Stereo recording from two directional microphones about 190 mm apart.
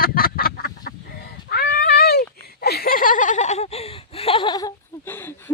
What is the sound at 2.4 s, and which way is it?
Laughter, 55° left (ahead or behind).